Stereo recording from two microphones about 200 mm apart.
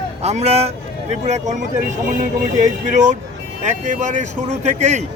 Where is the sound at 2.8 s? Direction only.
35° right (ahead or behind).